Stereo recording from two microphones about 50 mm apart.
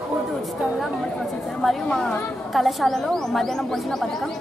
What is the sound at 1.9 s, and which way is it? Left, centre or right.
Speech, centre.